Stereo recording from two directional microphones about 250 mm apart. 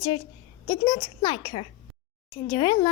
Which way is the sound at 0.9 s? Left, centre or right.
Centre.